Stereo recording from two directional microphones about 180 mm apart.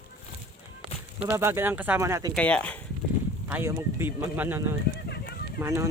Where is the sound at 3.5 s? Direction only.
10° right (ahead or behind).